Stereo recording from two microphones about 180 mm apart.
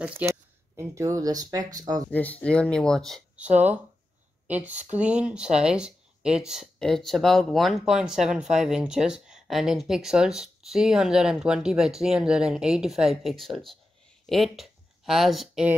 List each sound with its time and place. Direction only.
0.0 s speech: 15° right (ahead or behind)
2.0 s speech: 10° left (ahead or behind)